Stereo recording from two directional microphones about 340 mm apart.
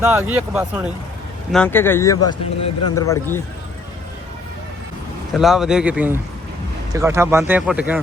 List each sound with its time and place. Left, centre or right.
0.0 s speech: centre
2.2 s speech: left
2.9 s speech: centre
5.3 s a man's voice: centre